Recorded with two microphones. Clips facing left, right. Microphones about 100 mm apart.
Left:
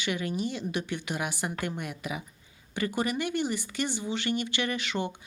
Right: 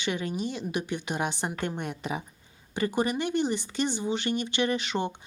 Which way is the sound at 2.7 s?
20° right (ahead or behind).